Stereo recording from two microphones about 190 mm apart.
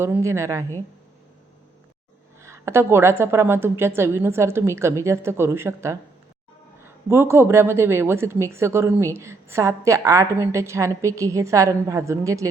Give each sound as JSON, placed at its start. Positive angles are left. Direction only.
{"t": 0.0, "sound": "a woman's voice", "side_deg": -15}
{"t": 2.4, "sound": "a woman's voice", "side_deg": -15}